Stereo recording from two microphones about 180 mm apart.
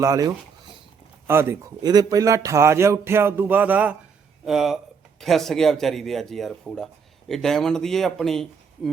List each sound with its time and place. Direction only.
0.0 s a man's voice: 20° right (ahead or behind); by 8.9 s centre (ahead or behind)